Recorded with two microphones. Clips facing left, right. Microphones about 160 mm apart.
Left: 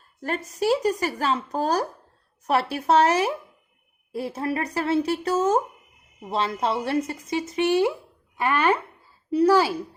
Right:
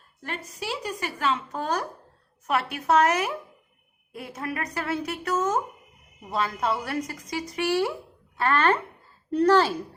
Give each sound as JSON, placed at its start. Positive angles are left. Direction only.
{"t": 0.2, "sound": "a woman's voice", "side_deg": 40}